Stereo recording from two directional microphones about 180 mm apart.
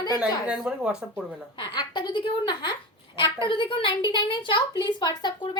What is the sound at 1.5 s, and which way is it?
A woman's voice, 25° left (ahead or behind).